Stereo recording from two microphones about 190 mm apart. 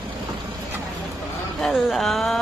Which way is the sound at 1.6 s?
Centre (ahead or behind).